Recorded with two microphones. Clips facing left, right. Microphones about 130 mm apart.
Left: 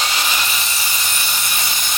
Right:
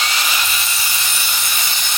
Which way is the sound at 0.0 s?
15° left (ahead or behind).